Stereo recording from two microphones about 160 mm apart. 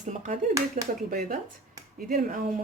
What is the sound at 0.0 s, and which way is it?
Speech, 50° right (ahead or behind).